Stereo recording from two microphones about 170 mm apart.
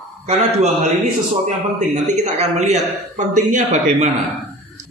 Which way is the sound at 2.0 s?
40° right (ahead or behind).